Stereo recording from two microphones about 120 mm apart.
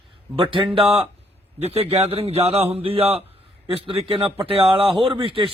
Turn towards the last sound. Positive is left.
turn(degrees=-50)  # may be behind; listen again after turning